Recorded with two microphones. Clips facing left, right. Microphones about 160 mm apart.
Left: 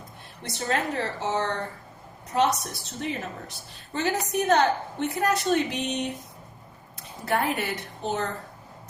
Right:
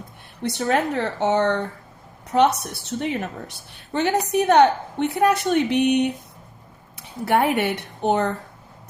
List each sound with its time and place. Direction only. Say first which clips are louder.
0.4 s a woman's voice: right 6 dB; 65° right (ahead or behind)